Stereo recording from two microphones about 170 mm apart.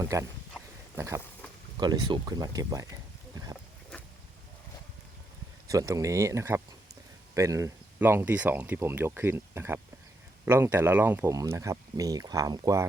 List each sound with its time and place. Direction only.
0.0 s speech: 20° right (ahead or behind)
0.9 s a sound: 15° right (ahead or behind)
1.8 s speech: 25° right (ahead or behind)
5.6 s speech: 20° right (ahead or behind)